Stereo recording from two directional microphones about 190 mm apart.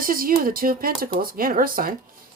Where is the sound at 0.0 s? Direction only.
50° right (ahead or behind).